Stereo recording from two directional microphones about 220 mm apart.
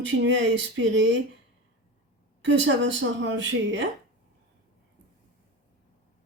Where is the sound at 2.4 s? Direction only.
55° right (ahead or behind).